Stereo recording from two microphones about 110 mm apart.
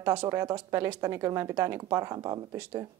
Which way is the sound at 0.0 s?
20° right (ahead or behind).